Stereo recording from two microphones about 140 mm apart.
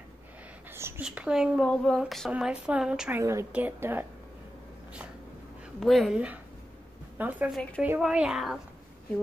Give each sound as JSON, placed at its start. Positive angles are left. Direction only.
{"t": 0.7, "sound": "a sound", "side_deg": -15}
{"t": 1.0, "sound": "a woman's voice", "side_deg": -5}
{"t": 3.2, "sound": "speech", "side_deg": -20}
{"t": 5.8, "sound": "a woman's voice", "side_deg": 0}